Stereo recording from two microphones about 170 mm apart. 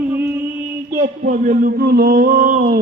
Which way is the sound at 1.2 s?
50° right (ahead or behind).